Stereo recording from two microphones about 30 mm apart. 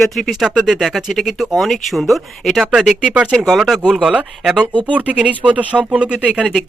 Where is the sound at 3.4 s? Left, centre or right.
Centre.